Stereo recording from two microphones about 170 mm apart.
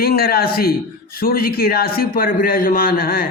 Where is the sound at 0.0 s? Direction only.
65° left (ahead or behind).